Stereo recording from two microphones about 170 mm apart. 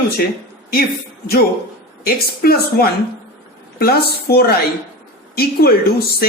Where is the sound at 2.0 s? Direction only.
65° left (ahead or behind).